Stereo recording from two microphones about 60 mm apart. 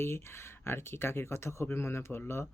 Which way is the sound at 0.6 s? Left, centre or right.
Left.